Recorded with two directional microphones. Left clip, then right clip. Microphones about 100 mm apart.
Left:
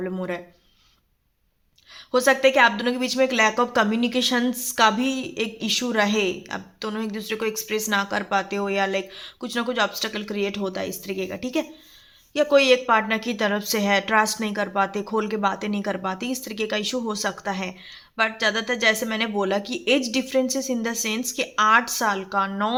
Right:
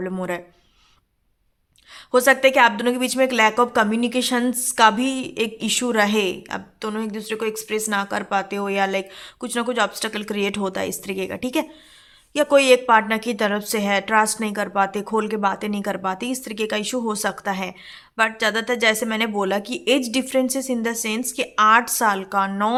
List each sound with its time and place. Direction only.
0.0 s a woman's voice: 40° right (ahead or behind)
2.1 s a woman's voice: 35° right (ahead or behind)
10.3 s a woman's voice: 60° right (ahead or behind); by 22.7 s 35° right (ahead or behind)